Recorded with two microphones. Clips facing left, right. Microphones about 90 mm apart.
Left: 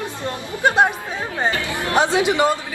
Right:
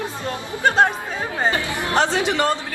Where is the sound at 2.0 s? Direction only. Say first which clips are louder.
Left 3 dB; 15° left (ahead or behind).